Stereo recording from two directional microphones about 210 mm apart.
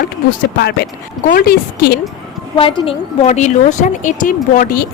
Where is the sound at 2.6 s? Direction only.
25° left (ahead or behind).